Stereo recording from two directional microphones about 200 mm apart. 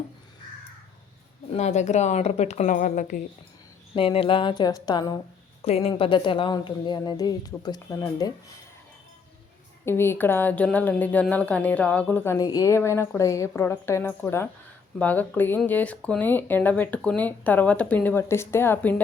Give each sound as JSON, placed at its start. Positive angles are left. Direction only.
{"t": 1.5, "sound": "a woman's voice", "side_deg": 35}
{"t": 3.9, "sound": "a woman's voice", "side_deg": 30}
{"t": 5.6, "sound": "a woman's voice", "side_deg": 30}
{"t": 9.8, "sound": "speech", "side_deg": 10}